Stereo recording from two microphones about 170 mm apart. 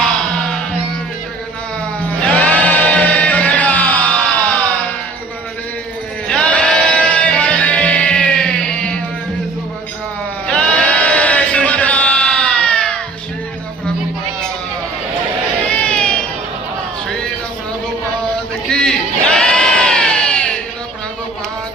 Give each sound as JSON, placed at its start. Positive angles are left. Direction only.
{"t": 2.2, "sound": "music", "side_deg": 10}
{"t": 6.2, "sound": "music", "side_deg": 5}
{"t": 10.4, "sound": "sheep", "side_deg": 5}
{"t": 15.6, "sound": "baby cry", "side_deg": 5}
{"t": 18.7, "sound": "crowd", "side_deg": 5}